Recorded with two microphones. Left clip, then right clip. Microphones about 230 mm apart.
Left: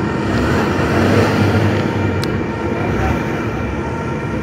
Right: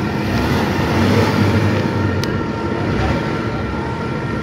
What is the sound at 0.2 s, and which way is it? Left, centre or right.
Vehicle, right.